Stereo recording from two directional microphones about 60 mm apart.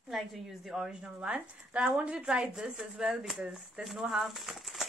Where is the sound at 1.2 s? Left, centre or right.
Centre.